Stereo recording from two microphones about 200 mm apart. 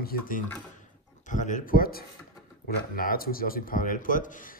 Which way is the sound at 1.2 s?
40° left (ahead or behind).